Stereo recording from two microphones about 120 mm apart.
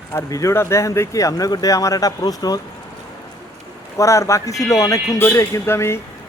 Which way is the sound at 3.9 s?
25° left (ahead or behind).